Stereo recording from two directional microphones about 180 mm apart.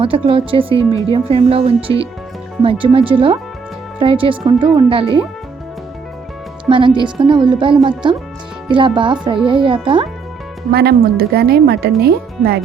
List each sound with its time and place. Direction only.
0.0 s speech: 30° right (ahead or behind)
6.7 s speech: 30° right (ahead or behind)
10.7 s speech: 60° right (ahead or behind)